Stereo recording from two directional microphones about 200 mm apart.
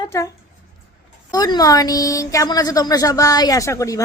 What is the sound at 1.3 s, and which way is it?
A woman's voice, 20° left (ahead or behind).